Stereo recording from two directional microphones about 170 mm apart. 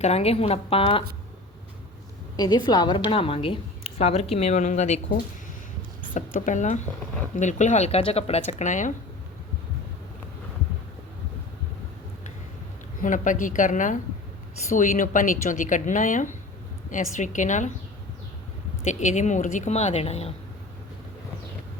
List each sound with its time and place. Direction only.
0.0 s a woman's voice: 40° left (ahead or behind)
2.3 s a woman's voice: 25° left (ahead or behind); by 8.9 s 45° left (ahead or behind)
13.0 s speech: 50° left (ahead or behind)
18.9 s speech: 45° left (ahead or behind)